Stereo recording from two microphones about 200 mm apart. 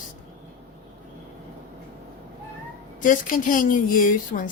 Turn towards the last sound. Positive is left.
turn(degrees=40)  # may be behind; listen again after turning